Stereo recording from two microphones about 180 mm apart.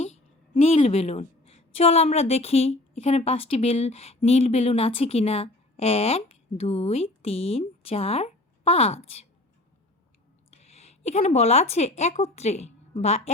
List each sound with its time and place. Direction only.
0.6 s a woman's voice: 35° left (ahead or behind)
10.5 s speech: 35° left (ahead or behind)